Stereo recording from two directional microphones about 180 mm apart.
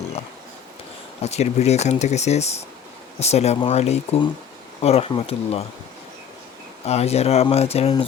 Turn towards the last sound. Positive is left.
turn(degrees=35)  # may be behind; listen again after turning